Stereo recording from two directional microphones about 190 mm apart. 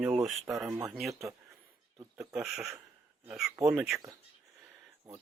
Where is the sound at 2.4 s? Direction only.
Centre (ahead or behind).